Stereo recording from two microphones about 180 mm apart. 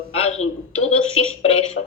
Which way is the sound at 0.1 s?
35° left (ahead or behind).